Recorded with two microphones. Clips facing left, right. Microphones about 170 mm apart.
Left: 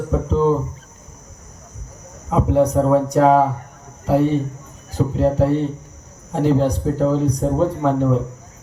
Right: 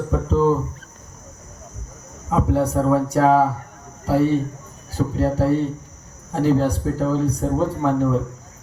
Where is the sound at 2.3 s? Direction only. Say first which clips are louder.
Left 3 dB; 20° left (ahead or behind).